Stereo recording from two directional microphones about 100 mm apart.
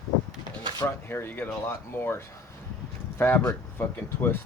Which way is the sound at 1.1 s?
20° left (ahead or behind).